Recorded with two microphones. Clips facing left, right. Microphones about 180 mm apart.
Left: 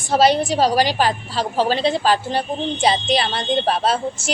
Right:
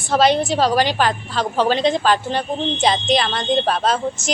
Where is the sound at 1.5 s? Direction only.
5° left (ahead or behind).